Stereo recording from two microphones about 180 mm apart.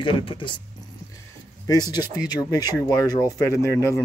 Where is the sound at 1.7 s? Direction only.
20° left (ahead or behind).